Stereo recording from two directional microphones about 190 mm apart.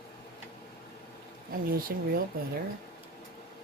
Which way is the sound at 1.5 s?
50° right (ahead or behind).